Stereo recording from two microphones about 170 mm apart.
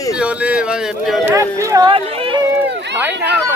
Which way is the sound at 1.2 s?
20° right (ahead or behind).